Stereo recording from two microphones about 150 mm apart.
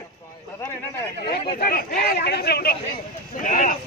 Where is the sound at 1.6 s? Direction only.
75° left (ahead or behind).